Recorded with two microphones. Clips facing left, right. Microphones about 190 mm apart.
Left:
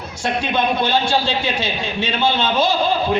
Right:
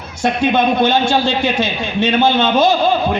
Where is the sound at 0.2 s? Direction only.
50° right (ahead or behind).